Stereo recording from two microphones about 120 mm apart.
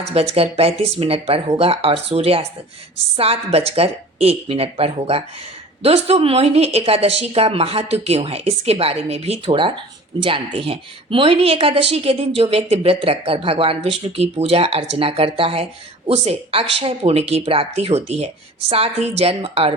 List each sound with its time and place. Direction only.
0.0 s a woman's voice: 60° right (ahead or behind)